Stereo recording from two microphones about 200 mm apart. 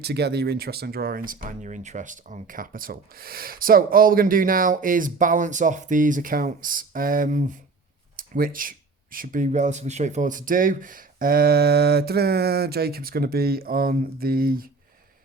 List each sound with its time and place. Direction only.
0.0 s speech: 55° right (ahead or behind)
8.1 s a sound: 45° right (ahead or behind)
9.1 s speech: 45° right (ahead or behind)